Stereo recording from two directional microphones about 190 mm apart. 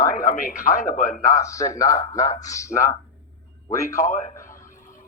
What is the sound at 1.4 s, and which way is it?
Speech, 15° left (ahead or behind).